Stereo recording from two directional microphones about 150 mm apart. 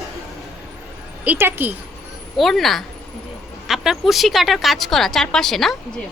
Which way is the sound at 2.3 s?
Centre (ahead or behind).